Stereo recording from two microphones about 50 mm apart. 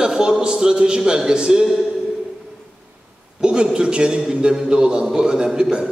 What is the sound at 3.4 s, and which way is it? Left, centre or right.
A man's voice, centre.